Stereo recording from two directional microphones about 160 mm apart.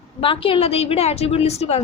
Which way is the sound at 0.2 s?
35° left (ahead or behind).